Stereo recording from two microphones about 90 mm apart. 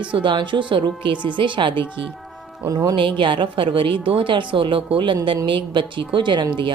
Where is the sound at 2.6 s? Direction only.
40° right (ahead or behind).